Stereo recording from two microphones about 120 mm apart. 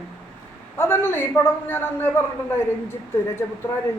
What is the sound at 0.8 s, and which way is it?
A woman's voice, 20° left (ahead or behind).